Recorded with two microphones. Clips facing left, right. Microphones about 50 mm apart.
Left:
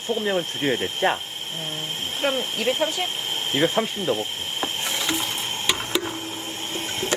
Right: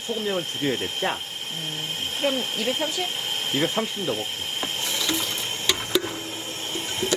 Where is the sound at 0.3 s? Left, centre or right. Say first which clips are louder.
Left 2 dB; left.